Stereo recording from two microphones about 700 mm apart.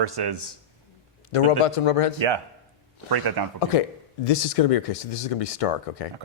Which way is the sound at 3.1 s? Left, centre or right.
Right.